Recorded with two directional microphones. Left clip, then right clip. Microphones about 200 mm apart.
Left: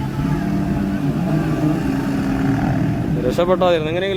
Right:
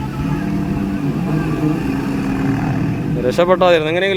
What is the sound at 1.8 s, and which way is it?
Vehicle, 10° left (ahead or behind).